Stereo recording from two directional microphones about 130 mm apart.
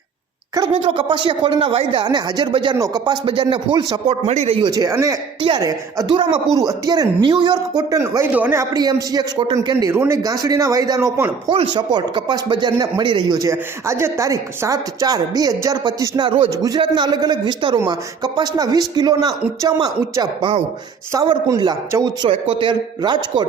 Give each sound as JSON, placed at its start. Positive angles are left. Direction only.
{"t": 0.7, "sound": "speech", "side_deg": -45}
{"t": 2.0, "sound": "speech", "side_deg": -30}
{"t": 4.1, "sound": "speech", "side_deg": -55}
{"t": 4.5, "sound": "a man's voice", "side_deg": -35}
{"t": 5.4, "sound": "speech", "side_deg": -35}
{"t": 8.3, "sound": "speech", "side_deg": -15}
{"t": 8.7, "sound": "a man's voice", "side_deg": -30}
{"t": 11.5, "sound": "speech", "side_deg": -40}
{"t": 22.3, "sound": "speech", "side_deg": -40}